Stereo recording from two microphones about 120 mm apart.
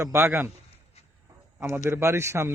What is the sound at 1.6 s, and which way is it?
Speech, 20° right (ahead or behind).